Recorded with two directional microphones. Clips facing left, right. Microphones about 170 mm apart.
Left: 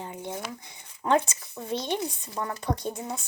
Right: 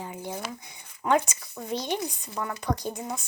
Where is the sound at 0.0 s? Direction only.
25° left (ahead or behind).